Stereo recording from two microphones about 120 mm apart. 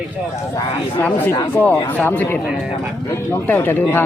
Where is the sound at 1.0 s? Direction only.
15° left (ahead or behind).